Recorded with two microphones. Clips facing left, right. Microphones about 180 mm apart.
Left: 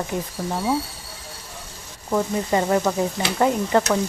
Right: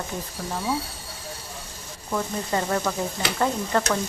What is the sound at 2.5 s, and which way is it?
Frying, 15° left (ahead or behind).